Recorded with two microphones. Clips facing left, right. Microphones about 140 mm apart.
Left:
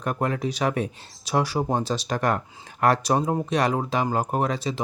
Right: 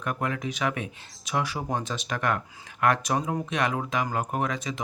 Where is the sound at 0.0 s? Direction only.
35° left (ahead or behind).